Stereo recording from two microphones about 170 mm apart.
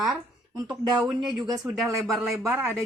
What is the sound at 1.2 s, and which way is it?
Speech, 25° right (ahead or behind).